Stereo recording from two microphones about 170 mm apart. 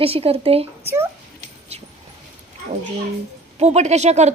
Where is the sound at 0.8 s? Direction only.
15° right (ahead or behind).